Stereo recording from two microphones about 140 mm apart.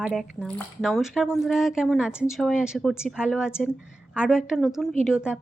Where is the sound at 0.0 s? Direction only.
5° right (ahead or behind).